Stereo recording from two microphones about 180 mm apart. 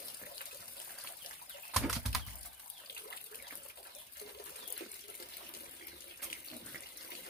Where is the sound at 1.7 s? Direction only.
Centre (ahead or behind).